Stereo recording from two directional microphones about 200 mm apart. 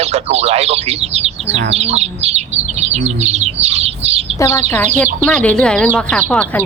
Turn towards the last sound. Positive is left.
turn(degrees=5)  # may be behind; listen again after turning